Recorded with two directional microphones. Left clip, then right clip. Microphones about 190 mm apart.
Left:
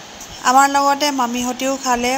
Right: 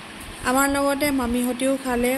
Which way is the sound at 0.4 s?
15° left (ahead or behind).